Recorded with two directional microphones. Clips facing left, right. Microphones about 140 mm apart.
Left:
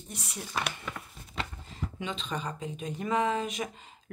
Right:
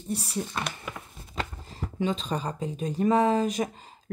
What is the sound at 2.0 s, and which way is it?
Speech, 35° right (ahead or behind).